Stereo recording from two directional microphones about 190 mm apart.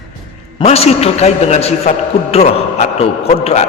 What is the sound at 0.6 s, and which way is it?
A man's voice, 35° left (ahead or behind).